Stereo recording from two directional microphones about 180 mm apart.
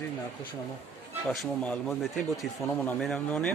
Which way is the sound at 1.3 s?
Centre (ahead or behind).